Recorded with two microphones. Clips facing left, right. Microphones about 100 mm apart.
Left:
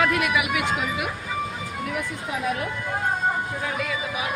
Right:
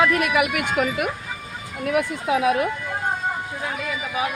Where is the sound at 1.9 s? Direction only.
75° right (ahead or behind).